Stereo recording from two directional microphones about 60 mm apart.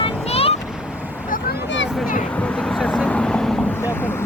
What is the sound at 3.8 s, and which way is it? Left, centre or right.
Speech, left.